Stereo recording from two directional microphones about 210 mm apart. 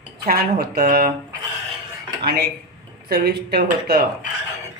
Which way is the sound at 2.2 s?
50° right (ahead or behind).